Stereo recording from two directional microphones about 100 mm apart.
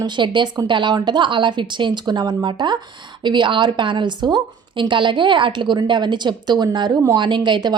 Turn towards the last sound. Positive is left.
turn(degrees=-45)  # may be behind; listen again after turning